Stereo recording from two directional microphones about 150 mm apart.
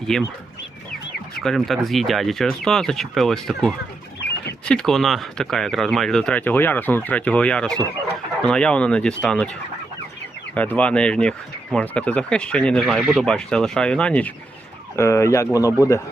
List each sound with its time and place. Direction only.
0.1 s speech: 5° left (ahead or behind)
1.4 s speech: centre (ahead or behind)
10.5 s speech: 10° left (ahead or behind)